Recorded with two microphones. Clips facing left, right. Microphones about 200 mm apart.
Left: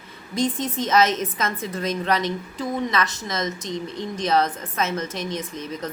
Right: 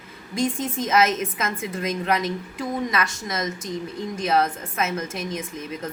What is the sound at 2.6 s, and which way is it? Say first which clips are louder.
A woman's voice: left 1 dB; 10° right (ahead or behind).